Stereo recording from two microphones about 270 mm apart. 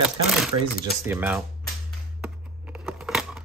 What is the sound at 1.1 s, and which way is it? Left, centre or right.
Speech, centre.